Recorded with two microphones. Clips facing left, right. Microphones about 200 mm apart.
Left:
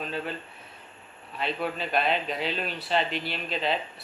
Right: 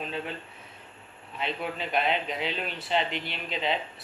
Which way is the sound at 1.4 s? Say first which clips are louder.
Left 2 dB; 20° right (ahead or behind).